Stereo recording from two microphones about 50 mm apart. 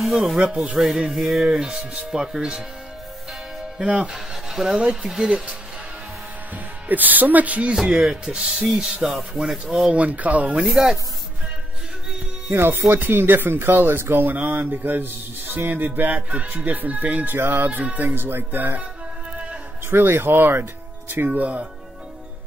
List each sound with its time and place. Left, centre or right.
0.0 s speech: centre
0.4 s speech: right
0.7 s speech: centre
3.7 s speech: centre
4.5 s a sound: centre
5.2 s speech: right
6.5 s speech: right
7.7 s speech: centre
9.8 s speech: right
10.7 s speech: centre
12.5 s speech: right
19.9 s speech: right
21.3 s speech: right